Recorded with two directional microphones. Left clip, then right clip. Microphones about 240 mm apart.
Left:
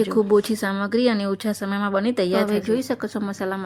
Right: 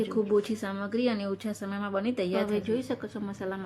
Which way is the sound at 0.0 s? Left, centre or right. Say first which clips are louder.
Left 8 dB; left.